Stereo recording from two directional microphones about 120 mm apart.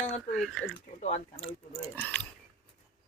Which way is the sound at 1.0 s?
65° left (ahead or behind).